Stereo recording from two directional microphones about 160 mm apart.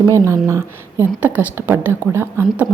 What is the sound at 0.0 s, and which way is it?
A woman's voice, 20° right (ahead or behind).